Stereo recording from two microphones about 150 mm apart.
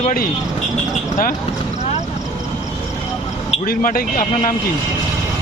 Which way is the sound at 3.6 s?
75° left (ahead or behind).